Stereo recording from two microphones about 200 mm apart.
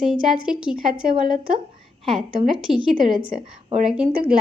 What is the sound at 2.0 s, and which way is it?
Speech, centre (ahead or behind).